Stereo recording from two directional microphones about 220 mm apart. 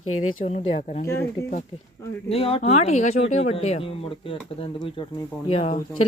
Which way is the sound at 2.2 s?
25° left (ahead or behind).